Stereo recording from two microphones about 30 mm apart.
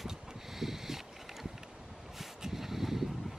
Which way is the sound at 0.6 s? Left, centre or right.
Centre.